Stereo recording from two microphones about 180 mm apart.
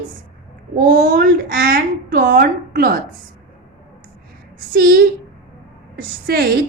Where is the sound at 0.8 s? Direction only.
55° right (ahead or behind).